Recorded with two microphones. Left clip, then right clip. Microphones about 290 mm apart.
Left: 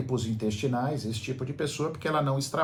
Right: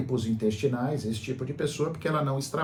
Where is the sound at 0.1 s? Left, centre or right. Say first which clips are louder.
Right 3 dB; centre.